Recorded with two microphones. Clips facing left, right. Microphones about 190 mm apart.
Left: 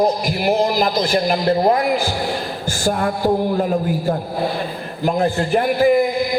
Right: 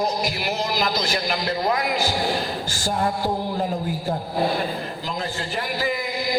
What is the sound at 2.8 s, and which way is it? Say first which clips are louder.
Music: left 6 dB; 55° left (ahead or behind).